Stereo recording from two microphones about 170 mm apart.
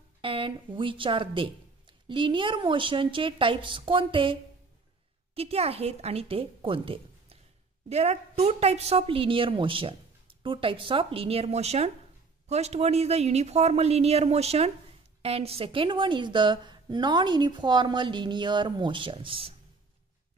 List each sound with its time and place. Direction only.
0.2 s a woman's voice: 30° right (ahead or behind)